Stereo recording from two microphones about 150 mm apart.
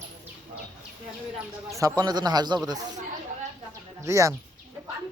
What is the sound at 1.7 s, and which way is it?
A man's voice, 25° right (ahead or behind).